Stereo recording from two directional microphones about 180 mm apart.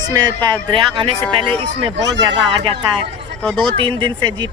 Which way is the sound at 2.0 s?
75° right (ahead or behind).